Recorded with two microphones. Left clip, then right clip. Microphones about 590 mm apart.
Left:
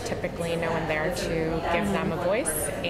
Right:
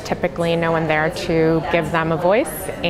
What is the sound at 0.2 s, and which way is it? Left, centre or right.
A woman's voice, right.